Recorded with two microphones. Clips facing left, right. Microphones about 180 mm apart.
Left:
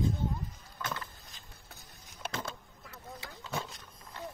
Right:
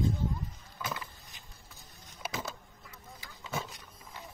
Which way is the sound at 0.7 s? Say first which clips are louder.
Even; 5° right (ahead or behind).